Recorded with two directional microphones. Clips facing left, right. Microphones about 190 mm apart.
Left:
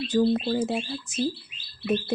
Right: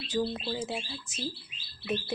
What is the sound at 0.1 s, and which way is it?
Speech, 50° left (ahead or behind).